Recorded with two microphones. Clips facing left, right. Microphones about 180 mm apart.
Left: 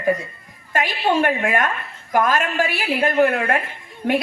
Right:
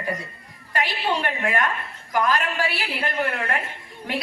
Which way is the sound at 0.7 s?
45° left (ahead or behind).